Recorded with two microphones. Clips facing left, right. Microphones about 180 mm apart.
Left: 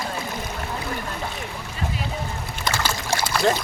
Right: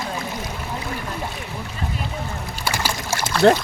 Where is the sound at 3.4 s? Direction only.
65° right (ahead or behind).